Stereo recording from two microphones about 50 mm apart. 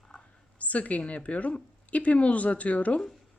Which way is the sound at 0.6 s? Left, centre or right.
Left.